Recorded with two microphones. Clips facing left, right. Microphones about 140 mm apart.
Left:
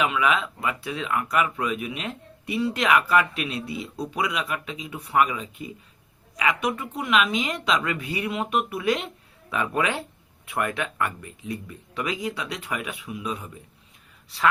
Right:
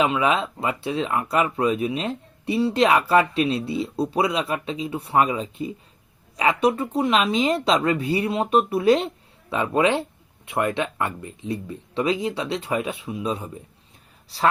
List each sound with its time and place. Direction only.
0.0 s speech: 30° right (ahead or behind)